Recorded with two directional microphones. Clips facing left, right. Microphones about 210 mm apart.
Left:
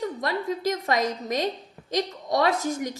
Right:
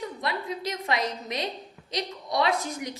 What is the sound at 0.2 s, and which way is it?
A woman's voice, 45° left (ahead or behind).